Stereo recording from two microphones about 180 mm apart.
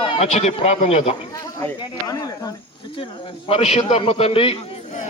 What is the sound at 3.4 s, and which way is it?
Speech, 35° left (ahead or behind).